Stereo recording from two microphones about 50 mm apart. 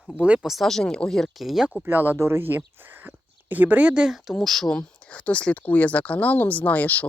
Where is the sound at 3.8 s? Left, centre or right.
Centre.